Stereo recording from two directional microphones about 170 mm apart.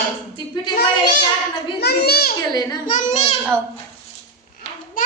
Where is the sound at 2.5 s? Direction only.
25° left (ahead or behind).